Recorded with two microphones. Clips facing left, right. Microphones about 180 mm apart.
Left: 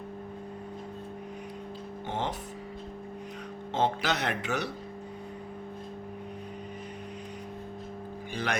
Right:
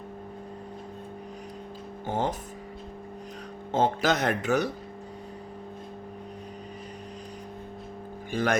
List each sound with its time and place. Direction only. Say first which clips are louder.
2.0 s speech: right 5 dB; 45° right (ahead or behind)
3.7 s speech: right 4 dB; 45° right (ahead or behind)
8.3 s speech: right 7 dB; 45° right (ahead or behind)